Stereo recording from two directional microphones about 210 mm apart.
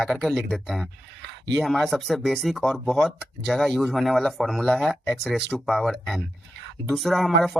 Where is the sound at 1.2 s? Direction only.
55° right (ahead or behind).